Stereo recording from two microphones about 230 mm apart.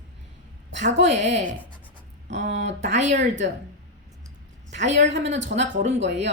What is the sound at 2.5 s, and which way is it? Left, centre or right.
Speech, right.